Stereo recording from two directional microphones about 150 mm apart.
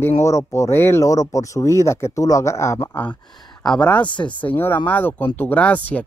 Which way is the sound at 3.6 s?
5° left (ahead or behind).